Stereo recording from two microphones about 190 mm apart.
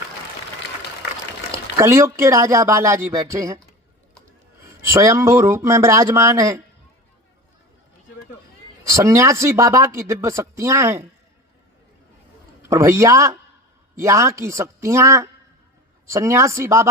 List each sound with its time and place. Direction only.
1.8 s speech: 15° right (ahead or behind)
4.8 s speech: 15° right (ahead or behind)
8.9 s speech: 15° right (ahead or behind)
12.6 s speech: 15° right (ahead or behind)